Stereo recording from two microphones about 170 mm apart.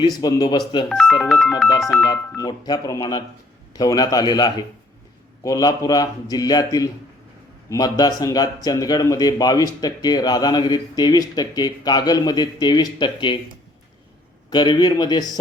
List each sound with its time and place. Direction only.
0.0 s speech: 25° left (ahead or behind)
0.9 s speech: centre (ahead or behind)
2.4 s speech: 25° left (ahead or behind)
14.5 s speech: 25° left (ahead or behind)